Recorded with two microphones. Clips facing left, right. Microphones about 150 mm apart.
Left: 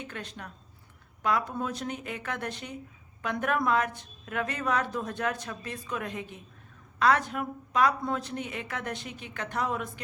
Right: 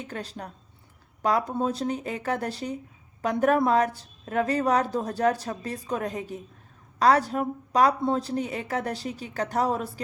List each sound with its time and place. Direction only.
0.0 s a woman's voice: 35° right (ahead or behind)